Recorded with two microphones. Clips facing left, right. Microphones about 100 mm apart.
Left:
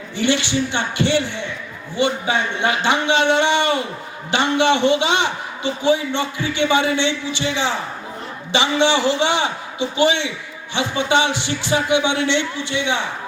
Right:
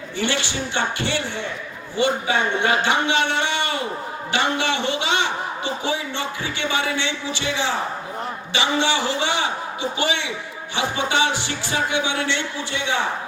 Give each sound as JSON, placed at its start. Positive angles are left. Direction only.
{"t": 0.2, "sound": "speech", "side_deg": 20}
{"t": 8.5, "sound": "speech", "side_deg": 20}